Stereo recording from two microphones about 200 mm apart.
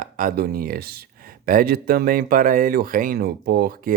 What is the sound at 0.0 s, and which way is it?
Speech, 45° right (ahead or behind).